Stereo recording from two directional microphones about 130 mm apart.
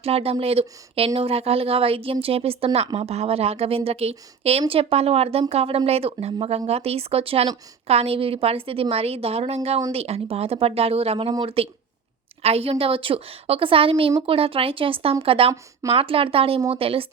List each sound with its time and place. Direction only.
0.0 s a woman's voice: 50° right (ahead or behind)